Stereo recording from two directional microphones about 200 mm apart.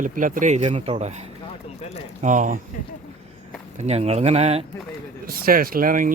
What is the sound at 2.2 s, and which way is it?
Speech, 40° right (ahead or behind).